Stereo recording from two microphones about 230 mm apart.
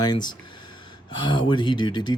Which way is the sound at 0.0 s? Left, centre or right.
Centre.